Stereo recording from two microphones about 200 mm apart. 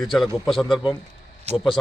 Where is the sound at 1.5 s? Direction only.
35° right (ahead or behind).